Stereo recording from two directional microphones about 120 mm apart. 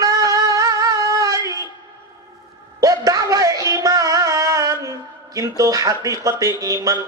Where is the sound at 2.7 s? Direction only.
30° right (ahead or behind).